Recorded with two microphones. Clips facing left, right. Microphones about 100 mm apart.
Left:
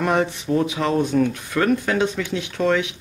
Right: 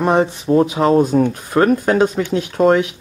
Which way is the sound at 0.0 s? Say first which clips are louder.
Right 5 dB; 30° right (ahead or behind).